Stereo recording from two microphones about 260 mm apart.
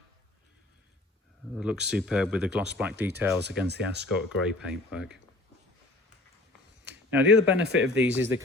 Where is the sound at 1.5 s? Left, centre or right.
Centre.